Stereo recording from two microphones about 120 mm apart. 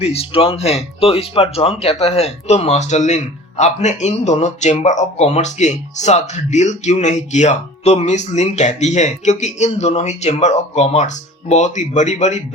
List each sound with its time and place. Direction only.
0.0 s speech: 55° left (ahead or behind); by 12.4 s 75° left (ahead or behind)